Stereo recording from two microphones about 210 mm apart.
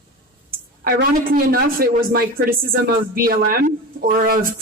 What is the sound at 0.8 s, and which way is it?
Speech, 45° right (ahead or behind).